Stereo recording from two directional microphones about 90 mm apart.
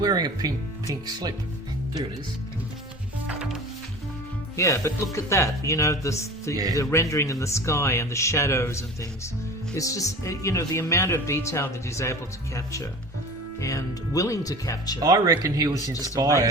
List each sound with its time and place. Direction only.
0.0 s speech: 45° right (ahead or behind)
3.2 s music: 10° right (ahead or behind)
4.5 s speech: 35° left (ahead or behind)
6.5 s speech: 45° right (ahead or behind)
6.7 s speech: 35° left (ahead or behind)
15.0 s speech: 40° right (ahead or behind)